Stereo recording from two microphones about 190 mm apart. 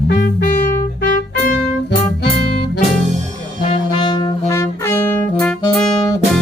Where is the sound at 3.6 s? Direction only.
25° left (ahead or behind); by 6.0 s centre (ahead or behind).